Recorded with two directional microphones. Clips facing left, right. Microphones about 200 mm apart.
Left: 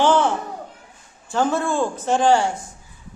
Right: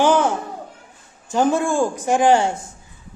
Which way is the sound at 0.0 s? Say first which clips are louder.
Right 1 dB; 15° right (ahead or behind).